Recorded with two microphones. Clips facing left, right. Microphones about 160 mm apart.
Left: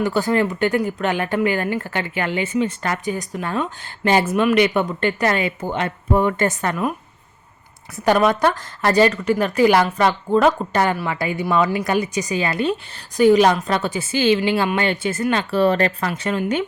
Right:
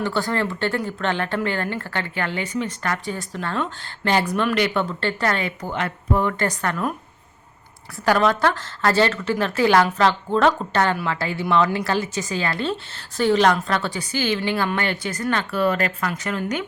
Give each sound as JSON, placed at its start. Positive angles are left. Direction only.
{"t": 0.0, "sound": "a woman's voice", "side_deg": 15}
{"t": 8.0, "sound": "a woman's voice", "side_deg": 20}